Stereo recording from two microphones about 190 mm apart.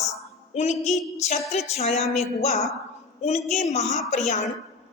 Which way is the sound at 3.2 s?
35° left (ahead or behind).